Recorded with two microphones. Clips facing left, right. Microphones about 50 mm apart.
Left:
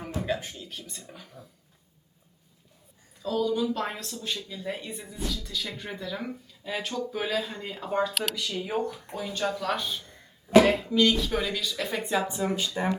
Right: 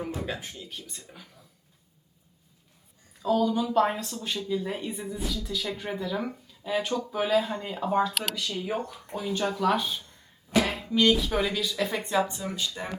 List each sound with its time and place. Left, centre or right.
0.0 s speech: centre
3.2 s speech: centre
12.5 s speech: left